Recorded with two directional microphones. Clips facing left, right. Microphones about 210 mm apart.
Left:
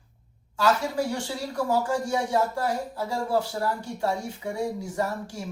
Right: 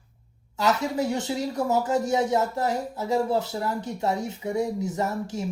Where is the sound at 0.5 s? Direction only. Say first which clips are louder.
Even; 20° right (ahead or behind).